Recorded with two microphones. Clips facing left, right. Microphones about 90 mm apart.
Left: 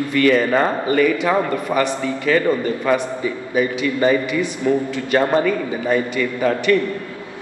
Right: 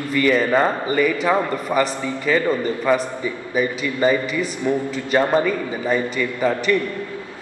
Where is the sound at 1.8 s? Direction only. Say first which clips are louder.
Right 1 dB; 15° right (ahead or behind).